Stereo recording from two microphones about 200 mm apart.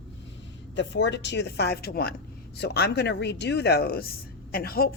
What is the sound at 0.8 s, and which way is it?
Speech, 60° left (ahead or behind).